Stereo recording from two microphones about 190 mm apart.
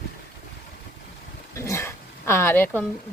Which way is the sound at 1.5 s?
15° left (ahead or behind).